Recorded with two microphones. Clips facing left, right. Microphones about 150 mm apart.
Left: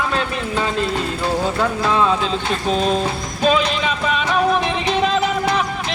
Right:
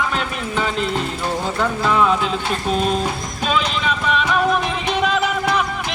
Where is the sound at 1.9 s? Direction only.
20° left (ahead or behind).